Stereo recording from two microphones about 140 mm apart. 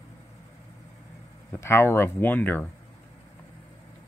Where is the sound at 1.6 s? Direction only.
15° left (ahead or behind).